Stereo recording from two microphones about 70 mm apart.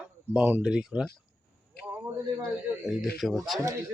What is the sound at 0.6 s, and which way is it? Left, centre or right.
Speech, centre.